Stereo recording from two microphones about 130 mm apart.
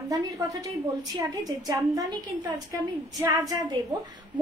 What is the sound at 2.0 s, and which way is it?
A woman's voice, 30° right (ahead or behind).